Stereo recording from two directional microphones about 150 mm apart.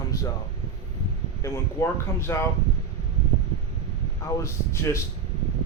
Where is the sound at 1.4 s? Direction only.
20° left (ahead or behind).